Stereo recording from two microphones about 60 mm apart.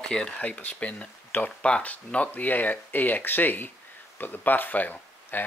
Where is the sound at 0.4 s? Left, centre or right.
Left.